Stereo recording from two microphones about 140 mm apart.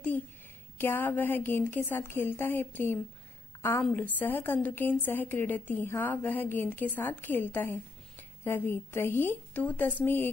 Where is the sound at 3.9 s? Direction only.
15° left (ahead or behind).